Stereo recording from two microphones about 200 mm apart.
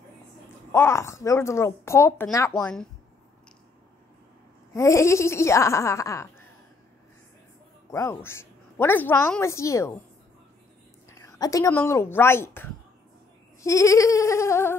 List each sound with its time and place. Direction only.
0.7 s a woman's voice: 10° left (ahead or behind)
4.7 s a woman's voice: 15° left (ahead or behind)
7.9 s a woman's voice: 15° left (ahead or behind)
11.1 s a woman's voice: 15° left (ahead or behind)